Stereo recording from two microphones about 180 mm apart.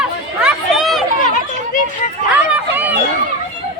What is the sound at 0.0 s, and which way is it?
Chatter, 5° right (ahead or behind).